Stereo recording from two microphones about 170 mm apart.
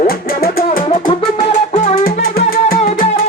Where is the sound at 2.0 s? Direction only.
60° left (ahead or behind).